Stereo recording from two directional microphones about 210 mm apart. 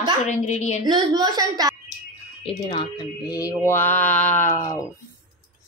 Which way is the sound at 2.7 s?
25° left (ahead or behind).